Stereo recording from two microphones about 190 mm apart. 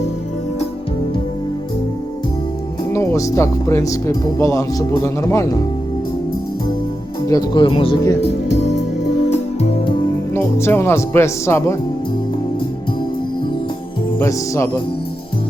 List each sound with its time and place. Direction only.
2.9 s speech: 15° left (ahead or behind)
7.3 s speech: 20° left (ahead or behind)
9.3 s music: 35° left (ahead or behind)
10.3 s speech: 15° left (ahead or behind)
14.2 s speech: 15° left (ahead or behind)